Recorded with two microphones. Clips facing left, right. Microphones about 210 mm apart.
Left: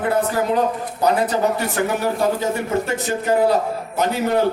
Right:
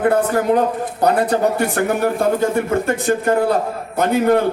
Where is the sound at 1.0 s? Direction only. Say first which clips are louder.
Right 2 dB; 55° right (ahead or behind).